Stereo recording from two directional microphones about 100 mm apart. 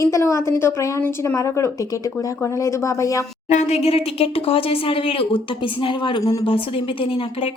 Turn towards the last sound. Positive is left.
turn(degrees=65)  # may be behind; listen again after turning